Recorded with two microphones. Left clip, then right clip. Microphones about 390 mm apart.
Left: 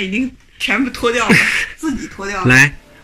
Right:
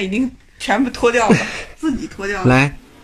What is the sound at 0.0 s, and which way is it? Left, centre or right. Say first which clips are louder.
Speech: left 1 dB; right.